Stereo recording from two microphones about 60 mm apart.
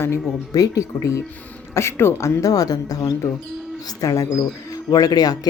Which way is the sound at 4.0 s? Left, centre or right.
Left.